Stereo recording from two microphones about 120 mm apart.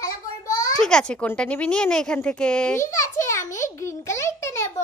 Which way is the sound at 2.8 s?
25° left (ahead or behind).